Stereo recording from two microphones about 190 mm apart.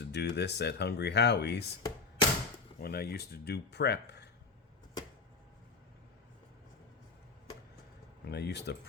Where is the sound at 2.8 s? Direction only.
55° left (ahead or behind).